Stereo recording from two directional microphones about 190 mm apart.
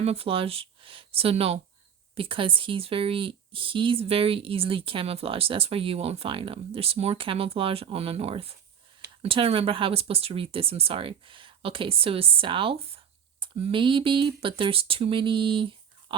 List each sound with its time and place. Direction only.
0.0 s speech: 30° right (ahead or behind)